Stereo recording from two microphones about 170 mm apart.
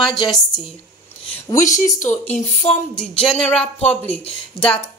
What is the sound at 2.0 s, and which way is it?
Speech, 45° left (ahead or behind).